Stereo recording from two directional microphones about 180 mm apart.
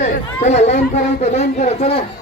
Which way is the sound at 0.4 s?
40° left (ahead or behind).